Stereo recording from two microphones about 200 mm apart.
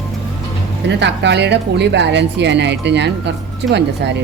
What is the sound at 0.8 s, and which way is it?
A woman's voice, 60° right (ahead or behind).